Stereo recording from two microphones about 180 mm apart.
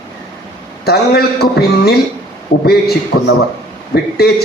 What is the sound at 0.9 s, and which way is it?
Speech, 60° left (ahead or behind).